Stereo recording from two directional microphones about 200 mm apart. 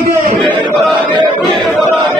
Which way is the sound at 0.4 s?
Centre (ahead or behind).